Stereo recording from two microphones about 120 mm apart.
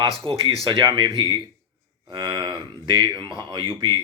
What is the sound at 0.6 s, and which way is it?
Speech, 35° right (ahead or behind).